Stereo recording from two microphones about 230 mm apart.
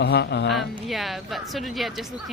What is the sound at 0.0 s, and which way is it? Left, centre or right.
Speech, left.